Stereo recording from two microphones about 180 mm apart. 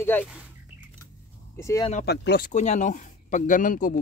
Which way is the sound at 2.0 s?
65° left (ahead or behind).